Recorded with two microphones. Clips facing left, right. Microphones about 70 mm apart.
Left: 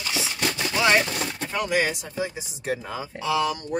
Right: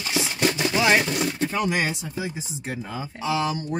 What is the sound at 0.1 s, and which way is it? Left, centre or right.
Chopping, right.